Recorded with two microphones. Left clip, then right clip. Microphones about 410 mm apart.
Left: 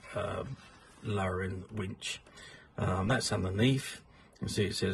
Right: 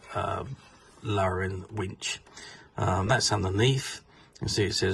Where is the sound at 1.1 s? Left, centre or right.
Centre.